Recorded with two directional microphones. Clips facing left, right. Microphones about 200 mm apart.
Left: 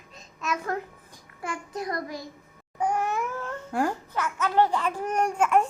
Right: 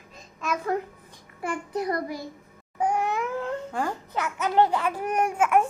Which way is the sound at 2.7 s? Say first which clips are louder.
Right 1 dB; 15° right (ahead or behind).